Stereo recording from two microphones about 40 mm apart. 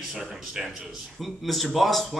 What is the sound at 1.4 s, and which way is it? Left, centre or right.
Speech, centre.